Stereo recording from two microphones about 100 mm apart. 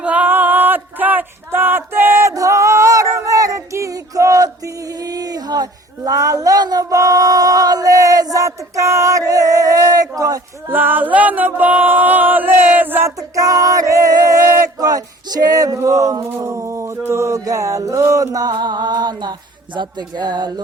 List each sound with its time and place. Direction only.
0.0 s a sound: 15° right (ahead or behind)
2.3 s female singing: 35° right (ahead or behind)
6.1 s male singing: 35° right (ahead or behind)
10.7 s music: 20° right (ahead or behind)
13.1 s female singing: 35° right (ahead or behind)
14.8 s male singing: 40° right (ahead or behind)